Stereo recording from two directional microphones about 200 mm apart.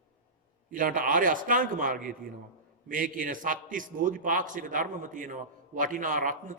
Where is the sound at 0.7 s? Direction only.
45° right (ahead or behind).